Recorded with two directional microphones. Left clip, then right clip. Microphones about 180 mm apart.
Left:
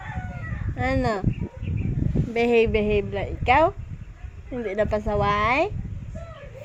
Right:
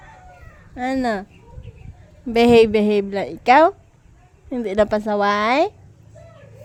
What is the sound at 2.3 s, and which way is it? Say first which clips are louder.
A woman's voice: right 7 dB; 75° right (ahead or behind).